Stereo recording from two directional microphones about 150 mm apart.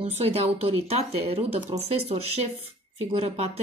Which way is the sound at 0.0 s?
40° right (ahead or behind).